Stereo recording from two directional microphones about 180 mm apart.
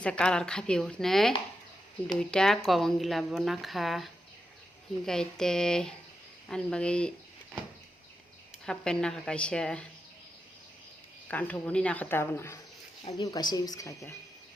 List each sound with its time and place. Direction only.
0.0 s speech: 5° left (ahead or behind)
8.6 s speech: 5° left (ahead or behind)
11.3 s speech: 10° left (ahead or behind)